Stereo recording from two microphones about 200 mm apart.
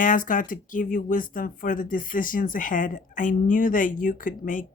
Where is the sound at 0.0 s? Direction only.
40° left (ahead or behind).